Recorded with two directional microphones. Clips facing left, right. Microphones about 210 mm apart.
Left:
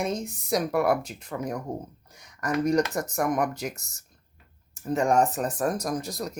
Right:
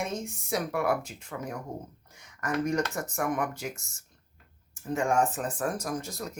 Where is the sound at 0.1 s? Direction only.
35° left (ahead or behind).